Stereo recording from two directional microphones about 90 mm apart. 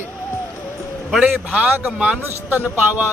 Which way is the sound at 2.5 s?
20° right (ahead or behind).